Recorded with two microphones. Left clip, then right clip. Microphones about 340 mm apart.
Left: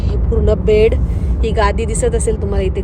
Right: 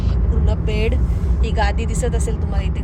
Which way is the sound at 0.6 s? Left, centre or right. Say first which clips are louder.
Left 12 dB; centre.